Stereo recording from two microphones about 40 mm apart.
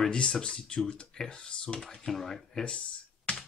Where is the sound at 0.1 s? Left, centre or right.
Left.